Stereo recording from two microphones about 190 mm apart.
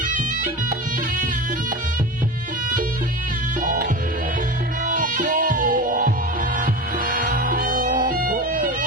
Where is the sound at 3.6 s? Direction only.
45° right (ahead or behind).